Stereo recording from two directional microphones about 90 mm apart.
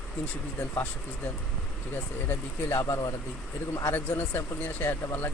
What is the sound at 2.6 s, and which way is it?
Speech, 40° left (ahead or behind).